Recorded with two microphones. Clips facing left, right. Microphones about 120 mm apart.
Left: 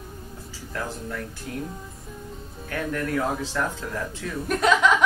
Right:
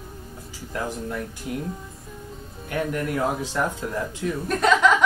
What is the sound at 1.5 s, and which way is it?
Speech, 20° right (ahead or behind).